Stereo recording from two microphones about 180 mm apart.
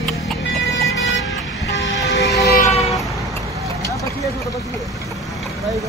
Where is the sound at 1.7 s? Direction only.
70° left (ahead or behind).